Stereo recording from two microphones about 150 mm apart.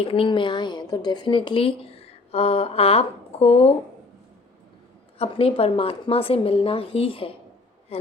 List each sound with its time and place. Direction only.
0.0 s speech: 40° left (ahead or behind)
5.2 s speech: 40° left (ahead or behind)